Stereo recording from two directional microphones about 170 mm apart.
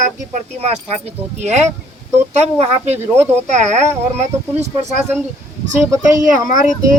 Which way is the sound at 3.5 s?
45° right (ahead or behind).